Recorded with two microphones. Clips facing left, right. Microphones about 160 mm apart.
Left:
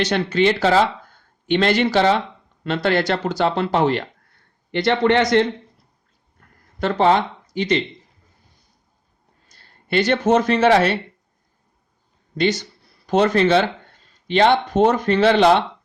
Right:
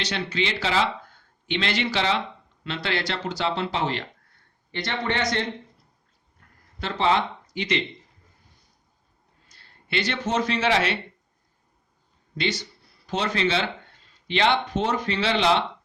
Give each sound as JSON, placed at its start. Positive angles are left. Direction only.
{"t": 0.0, "sound": "speech", "side_deg": 50}
{"t": 4.7, "sound": "a man's voice", "side_deg": 70}
{"t": 6.7, "sound": "speech", "side_deg": 50}
{"t": 9.5, "sound": "speech", "side_deg": 45}
{"t": 12.4, "sound": "speech", "side_deg": 45}